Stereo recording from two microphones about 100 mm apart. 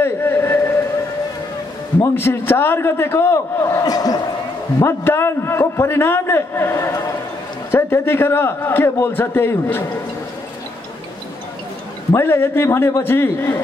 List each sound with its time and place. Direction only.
0.0 s a sound: 25° left (ahead or behind)
2.0 s a man's voice: 25° left (ahead or behind); by 4.2 s 40° left (ahead or behind)
4.7 s a man's voice: 25° left (ahead or behind)
12.1 s a man's voice: 25° left (ahead or behind)